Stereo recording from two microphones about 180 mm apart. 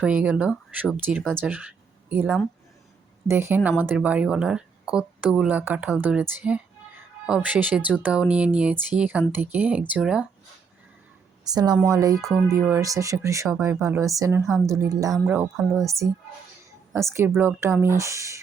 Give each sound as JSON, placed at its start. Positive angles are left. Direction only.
{"t": 0.0, "sound": "a woman's voice", "side_deg": -10}
{"t": 11.4, "sound": "a woman's voice", "side_deg": -20}
{"t": 15.4, "sound": "speech", "side_deg": 0}
{"t": 15.9, "sound": "a woman's voice", "side_deg": -15}